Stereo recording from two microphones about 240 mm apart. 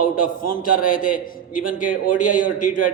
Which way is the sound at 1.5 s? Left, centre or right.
Left.